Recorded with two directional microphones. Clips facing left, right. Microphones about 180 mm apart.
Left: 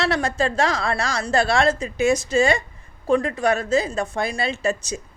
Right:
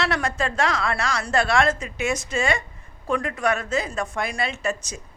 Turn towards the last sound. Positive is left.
turn(degrees=30)  # may be behind; listen again after turning